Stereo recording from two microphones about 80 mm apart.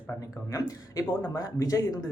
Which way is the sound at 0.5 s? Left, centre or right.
Left.